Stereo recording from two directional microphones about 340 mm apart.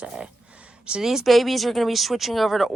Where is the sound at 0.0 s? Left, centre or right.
Centre.